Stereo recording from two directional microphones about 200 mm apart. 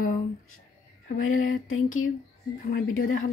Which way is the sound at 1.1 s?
90° left.